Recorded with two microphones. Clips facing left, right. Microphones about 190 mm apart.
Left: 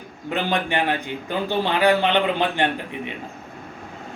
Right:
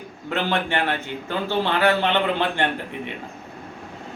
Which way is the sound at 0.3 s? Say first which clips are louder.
Even; 15° left (ahead or behind).